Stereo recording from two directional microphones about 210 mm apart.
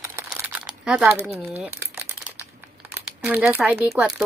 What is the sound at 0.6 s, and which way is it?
Crumpling, centre (ahead or behind).